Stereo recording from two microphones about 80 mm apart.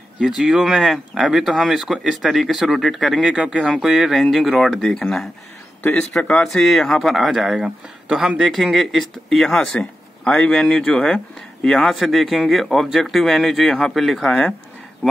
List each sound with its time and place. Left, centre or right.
0.4 s speech: centre
5.8 s speech: centre
6.1 s speech: centre